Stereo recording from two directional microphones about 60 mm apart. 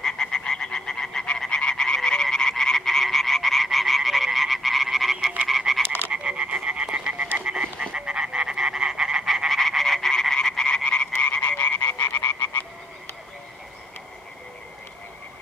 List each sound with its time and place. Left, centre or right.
0.0 s frog: centre
1.4 s croak: centre
6.1 s frog: centre
7.9 s croak: centre; by 12.1 s left